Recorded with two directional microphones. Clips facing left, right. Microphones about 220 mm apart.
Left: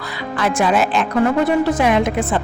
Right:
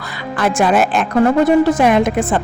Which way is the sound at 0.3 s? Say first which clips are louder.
Right 3 dB; 50° right (ahead or behind).